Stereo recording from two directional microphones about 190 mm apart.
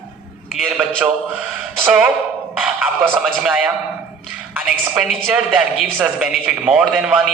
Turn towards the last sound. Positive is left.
turn(degrees=-5)  # may be behind; listen again after turning